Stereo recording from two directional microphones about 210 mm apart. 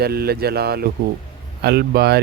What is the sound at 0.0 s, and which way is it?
Speech, 50° right (ahead or behind).